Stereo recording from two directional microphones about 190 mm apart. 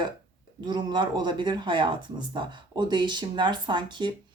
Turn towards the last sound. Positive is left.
turn(degrees=-25)  # may be behind; listen again after turning